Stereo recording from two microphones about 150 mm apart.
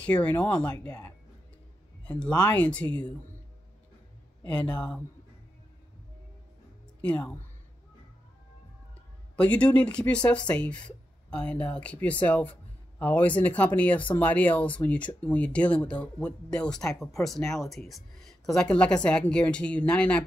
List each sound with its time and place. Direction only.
0.0 s speech: 10° left (ahead or behind)
4.6 s speech: 5° left (ahead or behind)
7.0 s speech: 10° left (ahead or behind)
9.4 s speech: 10° left (ahead or behind)